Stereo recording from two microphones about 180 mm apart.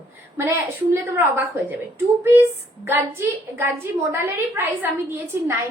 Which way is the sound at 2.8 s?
10° right (ahead or behind).